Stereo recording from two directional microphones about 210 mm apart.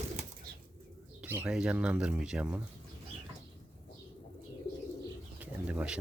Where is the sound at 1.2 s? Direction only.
5° right (ahead or behind).